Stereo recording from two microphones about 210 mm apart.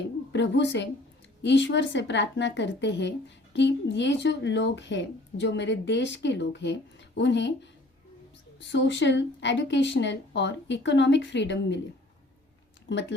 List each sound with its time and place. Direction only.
0.3 s a woman's voice: 60° left (ahead or behind)
8.7 s a woman's voice: 60° left (ahead or behind)
12.9 s a woman's voice: 60° left (ahead or behind)